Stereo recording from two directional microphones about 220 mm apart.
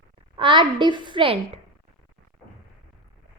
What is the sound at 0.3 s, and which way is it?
Child singing, 25° right (ahead or behind).